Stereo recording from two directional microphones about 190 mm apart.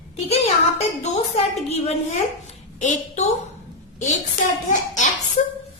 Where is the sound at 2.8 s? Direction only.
40° left (ahead or behind).